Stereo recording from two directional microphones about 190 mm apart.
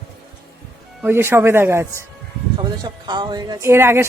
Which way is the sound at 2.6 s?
25° right (ahead or behind).